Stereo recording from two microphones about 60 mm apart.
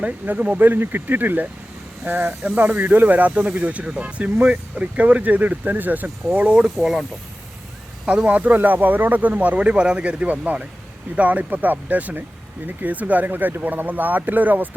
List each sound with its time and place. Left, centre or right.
0.0 s speech: right
6.7 s speech: centre
8.0 s speech: right